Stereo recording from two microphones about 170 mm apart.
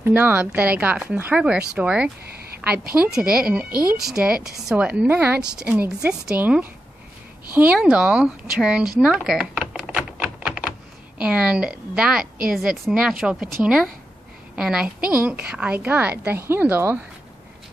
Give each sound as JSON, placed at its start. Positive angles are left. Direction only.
{"t": 0.0, "sound": "a woman's voice", "side_deg": -10}
{"t": 2.2, "sound": "a sound", "side_deg": -65}
{"t": 3.2, "sound": "a woman's voice", "side_deg": -5}
{"t": 9.0, "sound": "typewriter", "side_deg": -5}
{"t": 11.1, "sound": "a woman's voice", "side_deg": -5}